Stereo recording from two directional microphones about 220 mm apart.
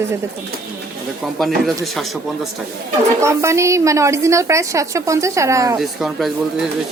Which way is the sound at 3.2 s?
15° right (ahead or behind).